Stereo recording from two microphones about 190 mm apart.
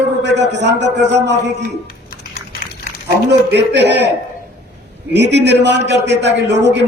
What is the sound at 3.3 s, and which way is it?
Speech, 65° right (ahead or behind).